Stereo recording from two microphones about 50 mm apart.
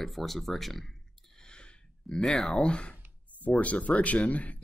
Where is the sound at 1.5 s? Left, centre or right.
Centre.